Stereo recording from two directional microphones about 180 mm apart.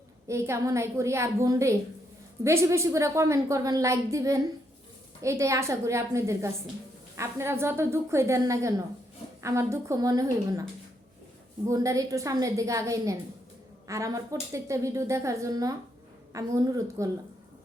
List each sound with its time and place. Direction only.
0.3 s a woman's voice: 15° right (ahead or behind)
11.7 s a woman's voice: 20° right (ahead or behind)